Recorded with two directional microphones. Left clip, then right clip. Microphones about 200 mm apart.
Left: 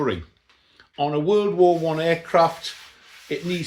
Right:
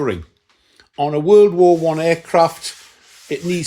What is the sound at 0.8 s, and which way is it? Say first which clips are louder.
Speech: right 4 dB; 40° right (ahead or behind).